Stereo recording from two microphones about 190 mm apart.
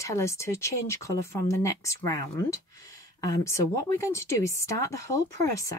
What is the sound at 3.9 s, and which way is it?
Speech, 15° left (ahead or behind).